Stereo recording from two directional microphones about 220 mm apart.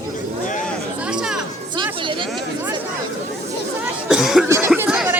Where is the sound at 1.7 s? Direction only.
20° right (ahead or behind).